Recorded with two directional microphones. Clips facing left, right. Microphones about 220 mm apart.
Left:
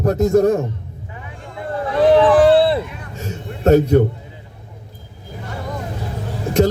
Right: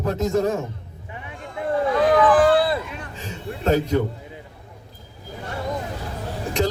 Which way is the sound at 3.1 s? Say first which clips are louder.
Left 5 dB; 45° left (ahead or behind).